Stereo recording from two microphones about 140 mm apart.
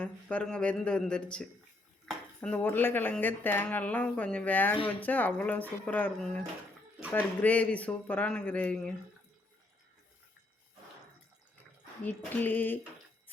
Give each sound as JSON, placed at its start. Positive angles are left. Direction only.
{"t": 0.0, "sound": "speech", "side_deg": 10}
{"t": 2.0, "sound": "dishes", "side_deg": 5}
{"t": 2.6, "sound": "speech", "side_deg": 15}
{"t": 12.0, "sound": "speech", "side_deg": 15}